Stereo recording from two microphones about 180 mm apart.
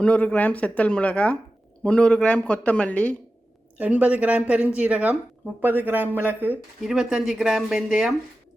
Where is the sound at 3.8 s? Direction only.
10° right (ahead or behind).